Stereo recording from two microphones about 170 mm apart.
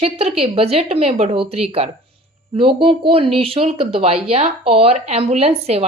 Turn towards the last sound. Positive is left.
turn(degrees=-35)  # may be behind; listen again after turning